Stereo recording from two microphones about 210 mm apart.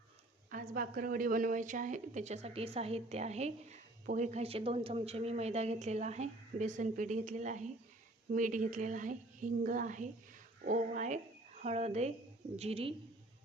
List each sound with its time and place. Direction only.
0.5 s a woman's voice: 40° right (ahead or behind)